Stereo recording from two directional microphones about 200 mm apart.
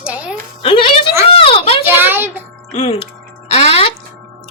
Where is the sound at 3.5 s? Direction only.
30° left (ahead or behind).